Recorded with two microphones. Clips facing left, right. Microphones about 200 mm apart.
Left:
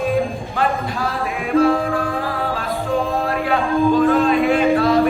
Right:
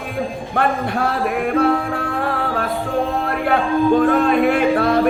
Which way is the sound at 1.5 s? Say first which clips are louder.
Left 5 dB; 60° right (ahead or behind).